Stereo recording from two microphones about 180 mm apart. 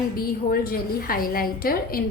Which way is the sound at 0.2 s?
55° left (ahead or behind).